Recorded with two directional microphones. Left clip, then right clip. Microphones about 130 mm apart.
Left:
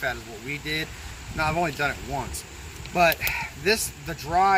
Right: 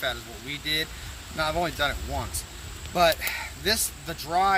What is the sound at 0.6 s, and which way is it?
Speech, 20° right (ahead or behind).